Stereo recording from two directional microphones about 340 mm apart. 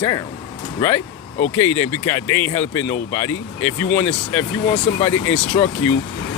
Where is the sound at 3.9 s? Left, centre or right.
Centre.